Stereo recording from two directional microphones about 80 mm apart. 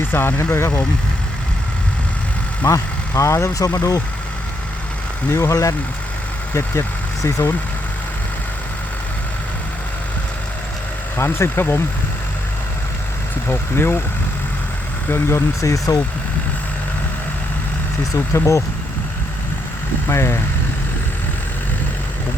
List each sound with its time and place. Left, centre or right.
0.1 s speech: left
2.6 s speech: left
5.3 s speech: left
6.5 s speech: left
11.2 s speech: left
13.5 s speech: left
15.1 s speech: left
15.9 s speech: left
18.1 s speech: left
20.1 s speech: left